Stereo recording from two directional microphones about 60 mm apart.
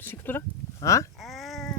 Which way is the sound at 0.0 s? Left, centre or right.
Left.